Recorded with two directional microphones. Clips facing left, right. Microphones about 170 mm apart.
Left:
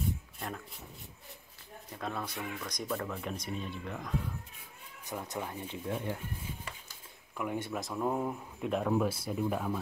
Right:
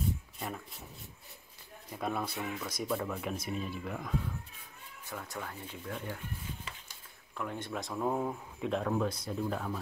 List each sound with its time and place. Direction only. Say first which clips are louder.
2.0 s speech: right 3 dB; 10° right (ahead or behind)
5.0 s speech: left 4 dB; 20° left (ahead or behind)
7.3 s speech: left 3 dB; 10° left (ahead or behind)